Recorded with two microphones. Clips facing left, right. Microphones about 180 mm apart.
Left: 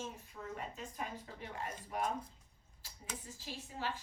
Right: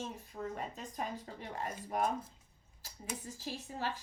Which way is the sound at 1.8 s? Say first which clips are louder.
Right 4 dB; 40° right (ahead or behind).